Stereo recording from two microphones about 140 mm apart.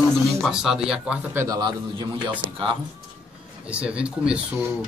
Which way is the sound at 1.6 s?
30° right (ahead or behind).